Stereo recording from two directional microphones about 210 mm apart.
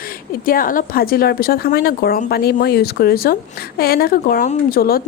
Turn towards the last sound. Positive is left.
turn(degrees=45)  # may be behind; listen again after turning